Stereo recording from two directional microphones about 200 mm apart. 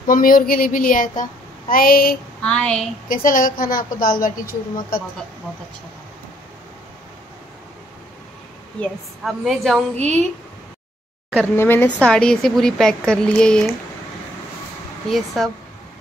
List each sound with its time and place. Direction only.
0.0 s a woman's voice: 45° left (ahead or behind)
2.4 s speech: 5° left (ahead or behind)
3.1 s a woman's voice: 45° left (ahead or behind)
8.8 s speech: centre (ahead or behind)
11.2 s speech: 5° left (ahead or behind)
15.0 s speech: centre (ahead or behind)